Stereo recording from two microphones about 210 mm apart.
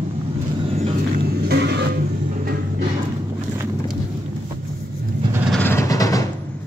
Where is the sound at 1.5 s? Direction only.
55° right (ahead or behind).